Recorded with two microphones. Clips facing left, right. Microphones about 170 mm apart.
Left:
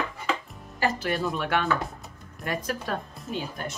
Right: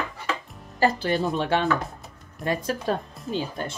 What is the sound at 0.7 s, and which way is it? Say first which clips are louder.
Speech: right 4 dB; 30° right (ahead or behind).